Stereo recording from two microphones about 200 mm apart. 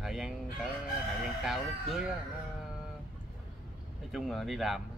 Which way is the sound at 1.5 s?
Centre (ahead or behind).